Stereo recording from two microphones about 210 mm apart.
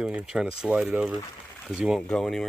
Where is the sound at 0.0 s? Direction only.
5° right (ahead or behind).